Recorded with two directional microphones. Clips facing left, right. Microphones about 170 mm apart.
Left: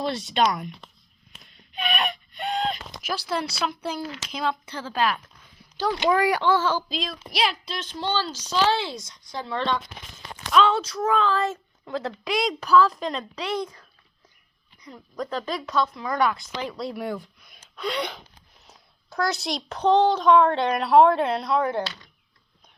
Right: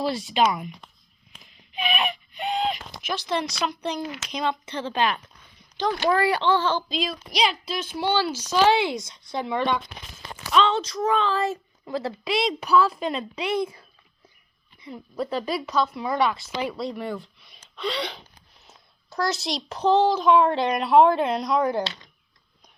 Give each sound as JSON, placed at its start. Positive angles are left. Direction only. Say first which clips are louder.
{"t": 0.0, "sound": "speech", "louder": "right 1 dB", "side_deg": -5}
{"t": 1.3, "sound": "a sound", "louder": "even", "side_deg": -5}
{"t": 3.1, "sound": "speech", "louder": "right 1 dB", "side_deg": 5}
{"t": 10.5, "sound": "speech", "louder": "left 1 dB", "side_deg": 5}
{"t": 16.9, "sound": "speech", "louder": "left 1 dB", "side_deg": 10}
{"t": 19.1, "sound": "speech", "louder": "even", "side_deg": 0}
{"t": 21.3, "sound": "speech", "louder": "even", "side_deg": 30}